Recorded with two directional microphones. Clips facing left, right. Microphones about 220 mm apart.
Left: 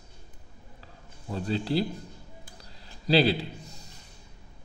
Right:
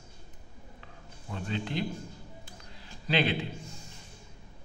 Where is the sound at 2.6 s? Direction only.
35° left (ahead or behind).